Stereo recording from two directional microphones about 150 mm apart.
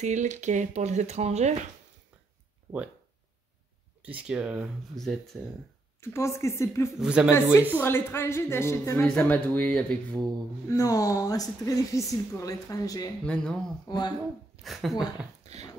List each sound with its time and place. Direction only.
0.0 s speech: 50° right (ahead or behind)
4.0 s speech: 10° right (ahead or behind)
5.9 s speech: 20° left (ahead or behind)
7.0 s speech: 5° right (ahead or behind)
7.8 s a woman's voice: 15° left (ahead or behind)
10.7 s speech: 20° left (ahead or behind)
13.2 s a woman's voice: 5° left (ahead or behind)
13.8 s speech: 30° left (ahead or behind)
14.6 s speech: centre (ahead or behind)